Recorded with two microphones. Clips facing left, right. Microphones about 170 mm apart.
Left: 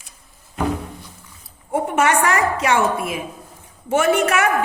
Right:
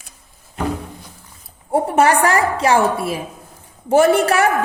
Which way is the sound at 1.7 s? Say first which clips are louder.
Right 3 dB; 35° right (ahead or behind).